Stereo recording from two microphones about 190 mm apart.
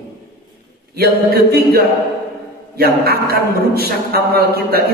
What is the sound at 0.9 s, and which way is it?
Speech, 55° right (ahead or behind).